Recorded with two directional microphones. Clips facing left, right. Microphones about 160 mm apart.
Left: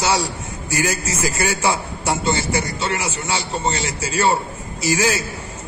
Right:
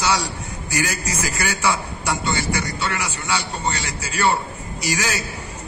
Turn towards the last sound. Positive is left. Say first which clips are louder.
# left 5 dB
turn(degrees=25)  # may be behind; listen again after turning